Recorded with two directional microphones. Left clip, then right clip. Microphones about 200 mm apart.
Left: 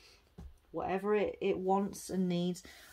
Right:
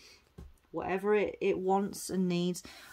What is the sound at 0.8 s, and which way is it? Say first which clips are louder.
Speech: right 3 dB; 35° right (ahead or behind).